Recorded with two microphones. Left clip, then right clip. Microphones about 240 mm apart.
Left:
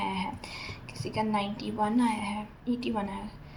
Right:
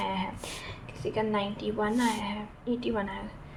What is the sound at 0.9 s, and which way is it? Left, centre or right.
A woman's voice, right.